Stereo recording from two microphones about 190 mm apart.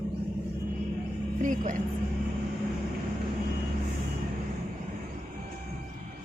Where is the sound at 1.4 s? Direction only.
40° right (ahead or behind).